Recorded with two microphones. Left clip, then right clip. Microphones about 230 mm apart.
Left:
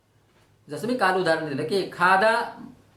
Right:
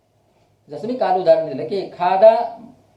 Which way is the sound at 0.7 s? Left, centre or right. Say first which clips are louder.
Right 4 dB; left.